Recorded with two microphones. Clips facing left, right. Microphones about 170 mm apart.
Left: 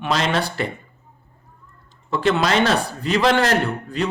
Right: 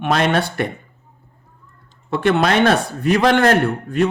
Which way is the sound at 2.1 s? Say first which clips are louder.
Right 3 dB; 55° right (ahead or behind).